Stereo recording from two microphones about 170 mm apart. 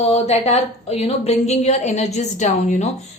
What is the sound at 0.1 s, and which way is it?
A woman's voice, 40° left (ahead or behind).